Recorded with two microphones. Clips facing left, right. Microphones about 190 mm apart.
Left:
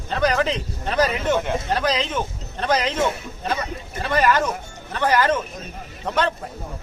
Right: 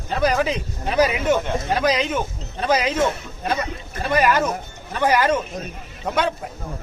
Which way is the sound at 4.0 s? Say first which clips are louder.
Right 1 dB; 10° right (ahead or behind).